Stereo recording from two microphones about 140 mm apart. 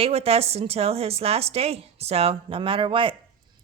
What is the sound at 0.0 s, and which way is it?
A woman's voice, 45° right (ahead or behind).